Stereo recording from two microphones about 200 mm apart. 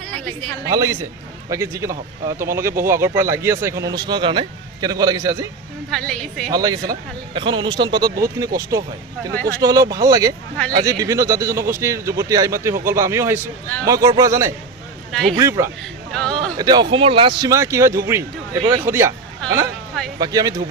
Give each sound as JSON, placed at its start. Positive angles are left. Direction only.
{"t": 0.0, "sound": "a sound", "side_deg": 5}
{"t": 0.7, "sound": "speech", "side_deg": -15}
{"t": 5.9, "sound": "a woman's voice", "side_deg": 5}
{"t": 6.5, "sound": "speech", "side_deg": -20}
{"t": 15.1, "sound": "a man's voice", "side_deg": 0}
{"t": 15.4, "sound": "speech", "side_deg": -15}
{"t": 15.8, "sound": "a sound", "side_deg": 5}
{"t": 16.6, "sound": "speech", "side_deg": -20}
{"t": 20.1, "sound": "speech", "side_deg": -20}